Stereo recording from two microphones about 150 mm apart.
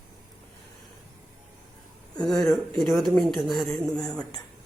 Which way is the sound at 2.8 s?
Centre (ahead or behind).